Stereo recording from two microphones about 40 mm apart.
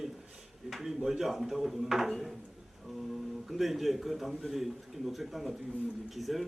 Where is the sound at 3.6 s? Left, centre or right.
Centre.